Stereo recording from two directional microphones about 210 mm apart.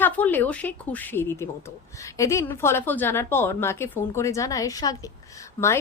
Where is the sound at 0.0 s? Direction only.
10° left (ahead or behind).